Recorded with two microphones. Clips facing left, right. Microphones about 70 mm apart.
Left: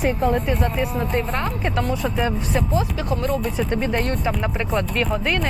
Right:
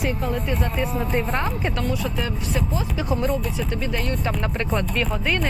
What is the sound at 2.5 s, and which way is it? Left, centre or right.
Speech, centre.